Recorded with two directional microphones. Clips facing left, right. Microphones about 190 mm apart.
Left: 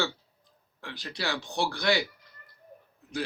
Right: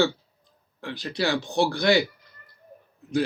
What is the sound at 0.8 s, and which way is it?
Speech, 20° right (ahead or behind).